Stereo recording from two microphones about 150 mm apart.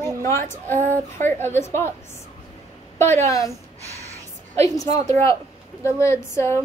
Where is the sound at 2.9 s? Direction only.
15° left (ahead or behind).